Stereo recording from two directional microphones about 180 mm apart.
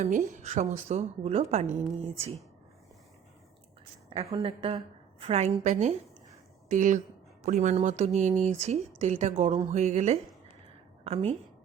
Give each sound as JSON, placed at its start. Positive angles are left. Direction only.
{"t": 0.0, "sound": "a woman's voice", "side_deg": -45}
{"t": 4.3, "sound": "a woman's voice", "side_deg": -30}